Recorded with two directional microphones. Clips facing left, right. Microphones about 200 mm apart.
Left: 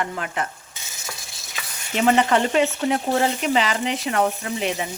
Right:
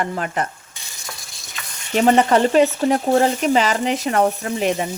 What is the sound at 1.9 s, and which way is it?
Frying, 40° right (ahead or behind).